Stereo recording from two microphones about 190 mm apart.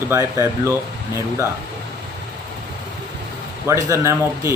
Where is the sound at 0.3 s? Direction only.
15° right (ahead or behind).